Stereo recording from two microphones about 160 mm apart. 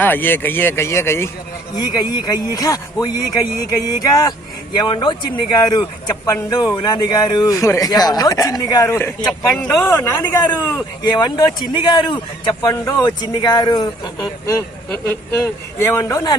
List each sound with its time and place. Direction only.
0.0 s speech: 10° left (ahead or behind)
1.7 s speech: 25° left (ahead or behind)
11.1 s speech: 25° left (ahead or behind)
15.8 s speech: 20° left (ahead or behind)